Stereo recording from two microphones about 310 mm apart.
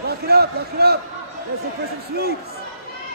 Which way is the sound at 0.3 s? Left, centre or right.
Right.